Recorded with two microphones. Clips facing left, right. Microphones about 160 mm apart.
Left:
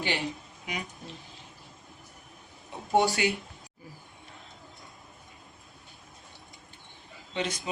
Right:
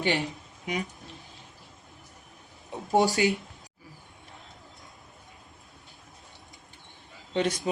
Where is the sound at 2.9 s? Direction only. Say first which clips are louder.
Right 2 dB; 40° right (ahead or behind).